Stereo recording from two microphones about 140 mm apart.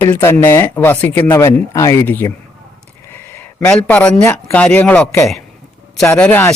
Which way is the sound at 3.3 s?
5° left (ahead or behind).